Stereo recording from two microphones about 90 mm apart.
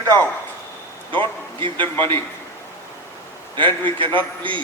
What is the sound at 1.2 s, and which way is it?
Speech, 65° right (ahead or behind).